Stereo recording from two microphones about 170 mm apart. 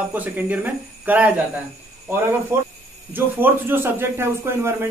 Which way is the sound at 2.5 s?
15° right (ahead or behind).